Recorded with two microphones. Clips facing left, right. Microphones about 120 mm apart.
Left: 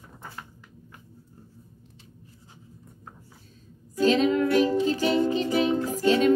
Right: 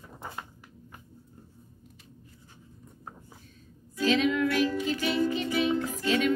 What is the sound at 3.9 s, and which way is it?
Music, 35° left (ahead or behind).